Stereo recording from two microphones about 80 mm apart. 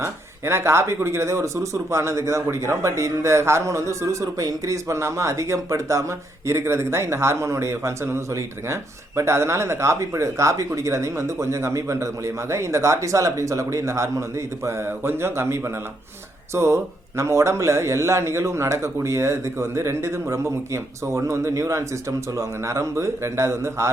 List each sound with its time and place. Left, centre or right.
0.0 s speech: right